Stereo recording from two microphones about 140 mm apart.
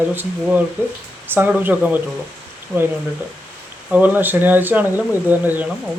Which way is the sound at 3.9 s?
10° right (ahead or behind).